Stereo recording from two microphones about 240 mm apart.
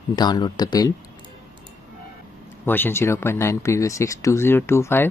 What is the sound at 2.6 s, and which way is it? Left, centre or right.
Speech, centre.